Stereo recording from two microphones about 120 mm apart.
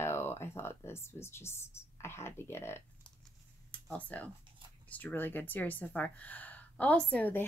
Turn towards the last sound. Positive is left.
turn(degrees=15)  # may be behind; listen again after turning